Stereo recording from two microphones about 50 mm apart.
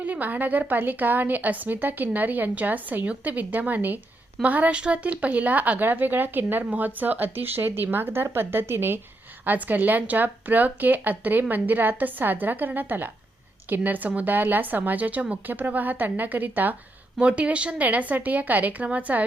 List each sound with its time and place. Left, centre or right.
0.0 s speech: right
9.4 s speech: right
17.2 s a woman's voice: right